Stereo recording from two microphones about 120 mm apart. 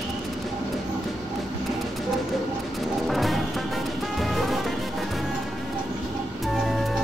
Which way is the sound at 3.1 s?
Centre (ahead or behind).